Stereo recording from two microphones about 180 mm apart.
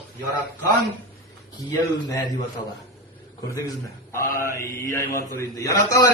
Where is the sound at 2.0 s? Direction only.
25° left (ahead or behind).